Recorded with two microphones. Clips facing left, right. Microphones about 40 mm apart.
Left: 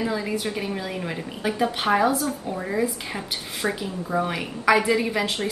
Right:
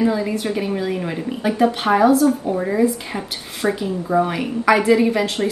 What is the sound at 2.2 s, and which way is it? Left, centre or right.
A woman's voice, centre.